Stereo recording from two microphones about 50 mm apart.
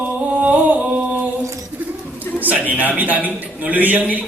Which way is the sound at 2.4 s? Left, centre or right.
Right.